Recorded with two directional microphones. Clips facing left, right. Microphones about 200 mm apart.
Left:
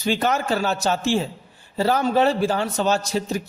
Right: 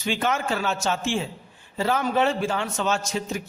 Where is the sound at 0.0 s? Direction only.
35° left (ahead or behind).